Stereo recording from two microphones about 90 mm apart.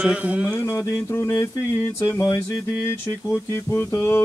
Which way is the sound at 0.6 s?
30° left (ahead or behind).